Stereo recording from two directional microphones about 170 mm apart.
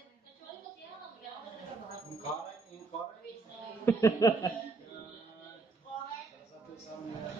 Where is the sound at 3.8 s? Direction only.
15° left (ahead or behind).